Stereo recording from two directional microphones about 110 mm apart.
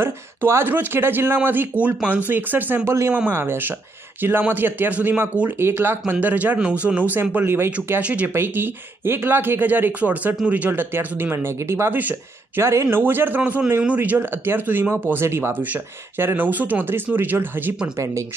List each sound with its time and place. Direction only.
0.0 s speech: 20° right (ahead or behind)
17.9 s speech: 30° right (ahead or behind)